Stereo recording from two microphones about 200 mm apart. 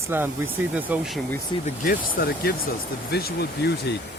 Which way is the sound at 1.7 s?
45° left (ahead or behind).